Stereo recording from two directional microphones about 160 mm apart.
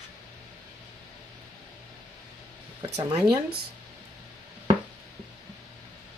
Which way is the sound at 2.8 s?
25° right (ahead or behind).